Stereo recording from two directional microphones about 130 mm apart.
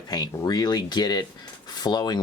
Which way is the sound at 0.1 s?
30° left (ahead or behind).